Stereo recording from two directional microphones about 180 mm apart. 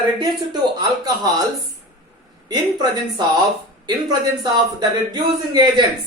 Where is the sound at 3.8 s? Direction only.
20° right (ahead or behind).